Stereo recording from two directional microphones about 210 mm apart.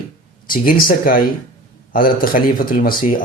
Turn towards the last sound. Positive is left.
turn(degrees=45)  # may be behind; listen again after turning